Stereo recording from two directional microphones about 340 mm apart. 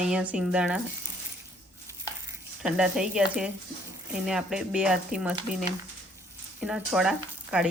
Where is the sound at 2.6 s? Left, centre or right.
Centre.